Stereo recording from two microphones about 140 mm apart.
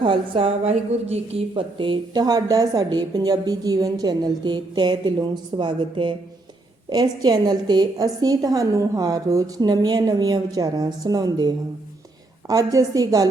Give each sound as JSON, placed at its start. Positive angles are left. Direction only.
{"t": 0.0, "sound": "a woman's voice", "side_deg": -40}